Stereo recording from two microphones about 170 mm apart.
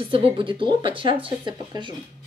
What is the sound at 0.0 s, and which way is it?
Speech, 30° right (ahead or behind).